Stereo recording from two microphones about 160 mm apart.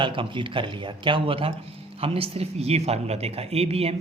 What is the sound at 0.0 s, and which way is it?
Speech, 30° right (ahead or behind).